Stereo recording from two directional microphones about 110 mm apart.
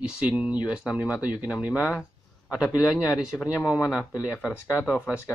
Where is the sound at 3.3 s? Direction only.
20° left (ahead or behind).